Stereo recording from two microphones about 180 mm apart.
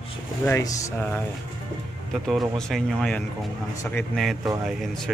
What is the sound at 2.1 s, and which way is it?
Speech, centre (ahead or behind).